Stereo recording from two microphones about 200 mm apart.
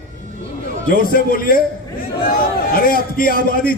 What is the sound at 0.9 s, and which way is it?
Speech, 45° left (ahead or behind).